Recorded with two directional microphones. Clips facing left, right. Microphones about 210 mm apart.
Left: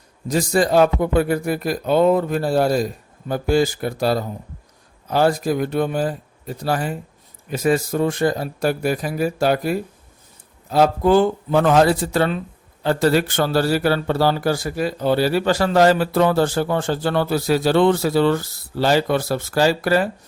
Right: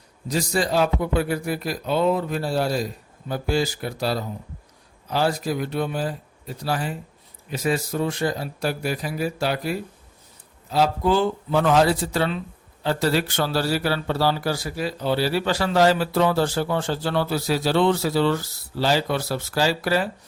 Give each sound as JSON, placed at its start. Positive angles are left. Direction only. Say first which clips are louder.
{"t": 0.3, "sound": "a man's voice", "louder": "left 5 dB", "side_deg": 50}